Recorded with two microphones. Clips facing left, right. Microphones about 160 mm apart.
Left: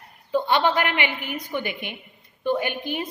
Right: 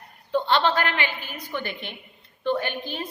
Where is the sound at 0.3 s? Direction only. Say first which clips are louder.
Left 1 dB; 10° left (ahead or behind).